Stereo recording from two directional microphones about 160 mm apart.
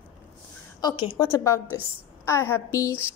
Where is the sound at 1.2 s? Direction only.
20° left (ahead or behind).